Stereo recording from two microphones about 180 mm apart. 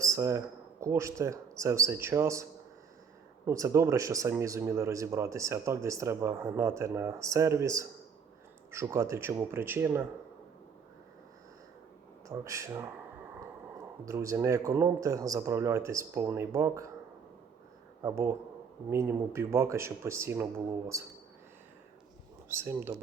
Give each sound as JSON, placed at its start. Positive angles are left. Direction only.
{"t": 0.0, "sound": "speech", "side_deg": -15}
{"t": 12.3, "sound": "speech", "side_deg": -15}
{"t": 14.0, "sound": "speech", "side_deg": -15}
{"t": 18.0, "sound": "speech", "side_deg": -15}
{"t": 22.4, "sound": "speech", "side_deg": -15}